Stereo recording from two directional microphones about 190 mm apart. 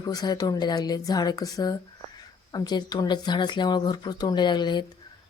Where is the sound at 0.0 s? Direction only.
20° left (ahead or behind).